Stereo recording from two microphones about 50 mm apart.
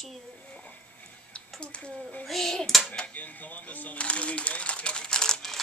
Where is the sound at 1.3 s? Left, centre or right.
Left.